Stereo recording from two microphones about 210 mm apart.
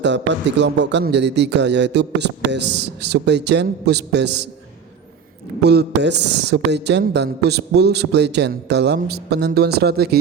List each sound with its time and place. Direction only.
0.0 s a woman's voice: 55° right (ahead or behind)
5.6 s a woman's voice: 55° right (ahead or behind)